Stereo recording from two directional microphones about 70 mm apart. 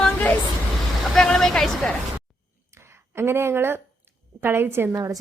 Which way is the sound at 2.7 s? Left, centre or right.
Right.